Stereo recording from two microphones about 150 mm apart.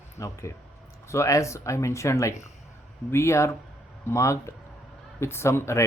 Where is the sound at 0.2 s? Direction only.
20° left (ahead or behind).